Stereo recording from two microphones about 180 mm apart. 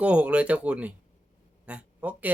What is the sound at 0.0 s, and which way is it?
Speech, 5° right (ahead or behind).